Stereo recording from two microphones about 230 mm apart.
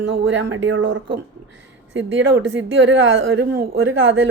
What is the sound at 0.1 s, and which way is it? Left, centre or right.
A woman's voice, right.